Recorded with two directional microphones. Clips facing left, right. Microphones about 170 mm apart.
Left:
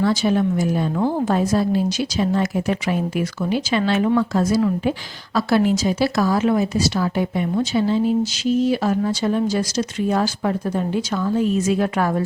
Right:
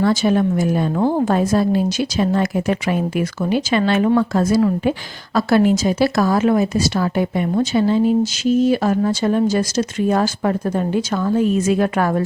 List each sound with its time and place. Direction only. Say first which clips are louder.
0.0 s a woman's voice: right 2 dB; 50° right (ahead or behind)